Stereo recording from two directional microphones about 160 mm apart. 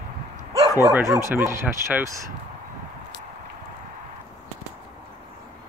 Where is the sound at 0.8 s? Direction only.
20° right (ahead or behind).